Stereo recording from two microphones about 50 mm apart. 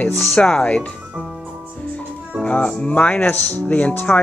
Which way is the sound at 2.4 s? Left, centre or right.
Left.